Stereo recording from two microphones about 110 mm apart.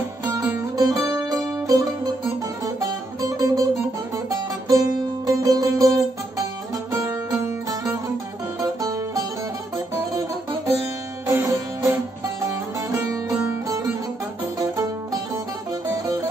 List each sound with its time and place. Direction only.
0.7 s music: 30° right (ahead or behind)
3.2 s music: 30° right (ahead or behind)
4.6 s music: 30° right (ahead or behind)
8.8 s music: 30° right (ahead or behind)
11.3 s music: 25° right (ahead or behind)
13.3 s music: 10° right (ahead or behind)